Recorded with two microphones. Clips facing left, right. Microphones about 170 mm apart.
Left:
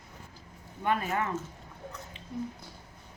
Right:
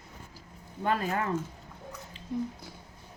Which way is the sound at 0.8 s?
35° right (ahead or behind).